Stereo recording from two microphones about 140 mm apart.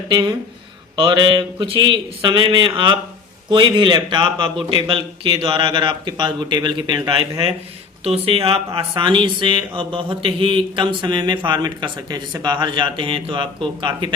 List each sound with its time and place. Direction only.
0.1 s speech: 30° right (ahead or behind)